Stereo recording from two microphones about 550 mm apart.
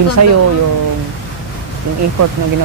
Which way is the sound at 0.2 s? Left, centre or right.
Right.